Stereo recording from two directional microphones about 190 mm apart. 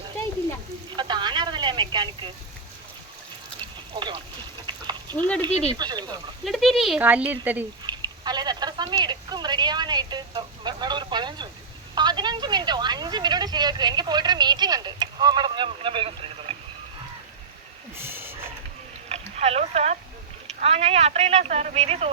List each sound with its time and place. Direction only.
0.9 s telephone: 25° right (ahead or behind)
4.6 s dog: 25° right (ahead or behind)
5.1 s speech: 10° left (ahead or behind)
5.7 s speech: 20° right (ahead or behind)
6.4 s speech: centre (ahead or behind)
7.9 s speech: 20° right (ahead or behind)
17.9 s vehicle: 10° right (ahead or behind)
19.0 s rowboat: 35° right (ahead or behind)
20.6 s speech: 30° right (ahead or behind)